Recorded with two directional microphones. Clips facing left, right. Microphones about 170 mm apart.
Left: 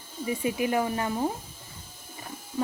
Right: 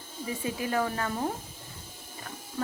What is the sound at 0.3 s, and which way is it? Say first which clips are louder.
Speech: left 5 dB; 15° left (ahead or behind).